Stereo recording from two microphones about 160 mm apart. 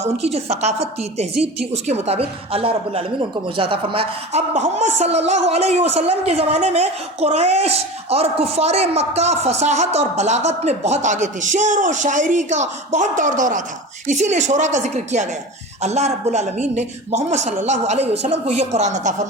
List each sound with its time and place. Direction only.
0.0 s a woman's voice: 40° right (ahead or behind)